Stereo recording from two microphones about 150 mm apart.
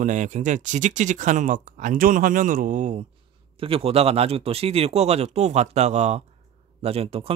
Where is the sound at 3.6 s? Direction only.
40° right (ahead or behind).